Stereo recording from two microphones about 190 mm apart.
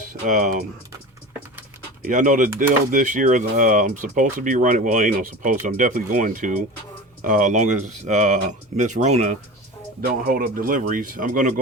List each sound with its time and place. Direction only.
0.1 s speech: 40° right (ahead or behind)
2.0 s speech: 40° right (ahead or behind)
10.2 s speech: 50° right (ahead or behind)